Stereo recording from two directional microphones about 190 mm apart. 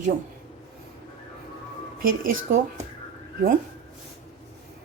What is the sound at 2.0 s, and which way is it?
Speech, 50° right (ahead or behind).